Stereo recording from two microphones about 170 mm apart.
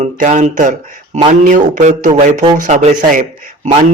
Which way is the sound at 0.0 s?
45° right (ahead or behind).